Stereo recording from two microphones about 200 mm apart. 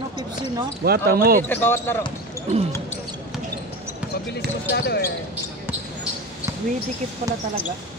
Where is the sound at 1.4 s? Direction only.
10° left (ahead or behind).